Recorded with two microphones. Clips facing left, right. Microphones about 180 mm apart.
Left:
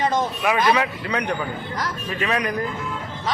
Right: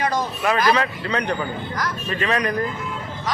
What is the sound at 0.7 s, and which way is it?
Speech, 10° left (ahead or behind).